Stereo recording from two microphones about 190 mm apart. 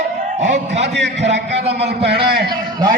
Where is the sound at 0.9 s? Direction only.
65° right (ahead or behind).